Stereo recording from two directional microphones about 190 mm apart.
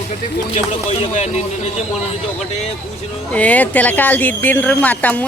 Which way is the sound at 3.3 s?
10° left (ahead or behind).